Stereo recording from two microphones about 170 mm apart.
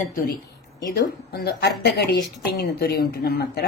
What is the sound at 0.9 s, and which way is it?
Speech, 75° left (ahead or behind).